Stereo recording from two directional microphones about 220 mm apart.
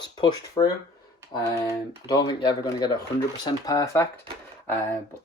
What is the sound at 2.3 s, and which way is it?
Speech, 20° left (ahead or behind).